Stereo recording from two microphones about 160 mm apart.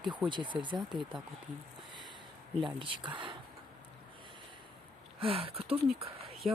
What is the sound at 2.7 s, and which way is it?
Speech, 30° right (ahead or behind).